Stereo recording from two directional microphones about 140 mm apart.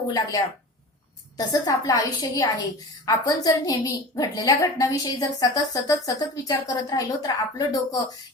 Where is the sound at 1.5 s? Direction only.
25° left (ahead or behind).